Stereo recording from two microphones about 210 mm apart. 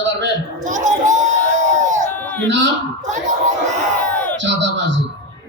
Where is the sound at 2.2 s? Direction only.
5° left (ahead or behind).